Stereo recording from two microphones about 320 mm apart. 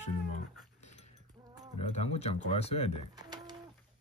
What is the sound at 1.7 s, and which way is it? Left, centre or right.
Speech, centre.